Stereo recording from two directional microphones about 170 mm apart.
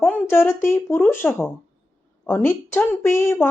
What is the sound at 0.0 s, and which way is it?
Speech, 15° left (ahead or behind).